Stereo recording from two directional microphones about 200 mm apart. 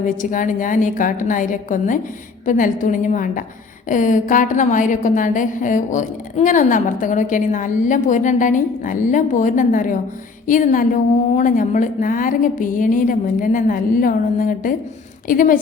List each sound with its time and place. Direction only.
0.0 s a woman's voice: 40° left (ahead or behind)